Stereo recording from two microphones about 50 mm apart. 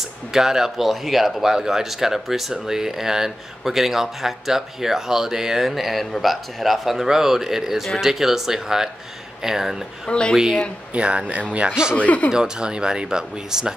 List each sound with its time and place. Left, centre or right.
0.3 s speech: centre
10.0 s speech: centre
10.3 s speech: centre
11.0 s speech: right
11.9 s speech: left
12.3 s speech: centre